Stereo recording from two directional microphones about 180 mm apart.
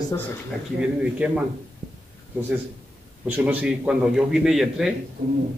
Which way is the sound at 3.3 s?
10° right (ahead or behind).